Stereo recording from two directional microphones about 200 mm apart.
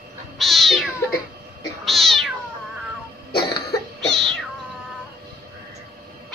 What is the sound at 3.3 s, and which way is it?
Cough, 25° left (ahead or behind).